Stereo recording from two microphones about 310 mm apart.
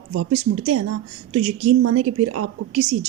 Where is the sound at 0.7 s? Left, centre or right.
Right.